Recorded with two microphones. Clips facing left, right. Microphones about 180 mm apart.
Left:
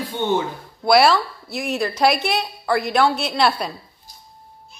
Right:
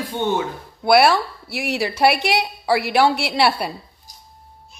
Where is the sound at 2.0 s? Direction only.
65° right (ahead or behind).